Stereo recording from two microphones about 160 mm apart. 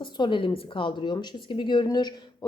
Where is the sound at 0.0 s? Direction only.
30° left (ahead or behind).